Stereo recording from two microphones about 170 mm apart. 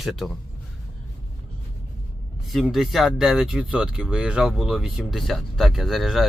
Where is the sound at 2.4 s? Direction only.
Centre (ahead or behind).